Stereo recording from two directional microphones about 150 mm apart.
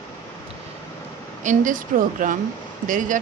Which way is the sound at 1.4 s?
60° right (ahead or behind).